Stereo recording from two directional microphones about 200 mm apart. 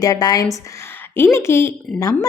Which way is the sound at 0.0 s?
20° left (ahead or behind).